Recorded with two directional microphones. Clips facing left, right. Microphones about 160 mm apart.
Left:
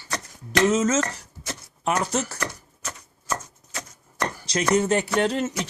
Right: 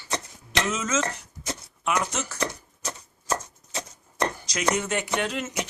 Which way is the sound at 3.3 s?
25° right (ahead or behind).